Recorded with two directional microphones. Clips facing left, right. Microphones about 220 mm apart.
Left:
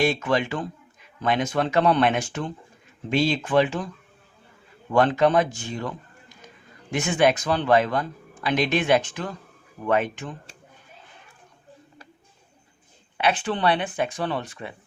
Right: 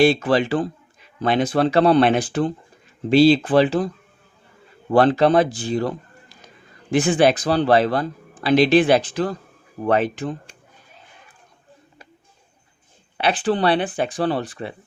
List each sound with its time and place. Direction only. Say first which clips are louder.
0.0 s speech: right 6 dB; 30° right (ahead or behind)
13.1 s speech: right 4 dB; 35° right (ahead or behind)